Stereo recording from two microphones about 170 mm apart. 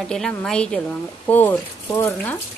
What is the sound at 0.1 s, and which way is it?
Speech, 5° left (ahead or behind).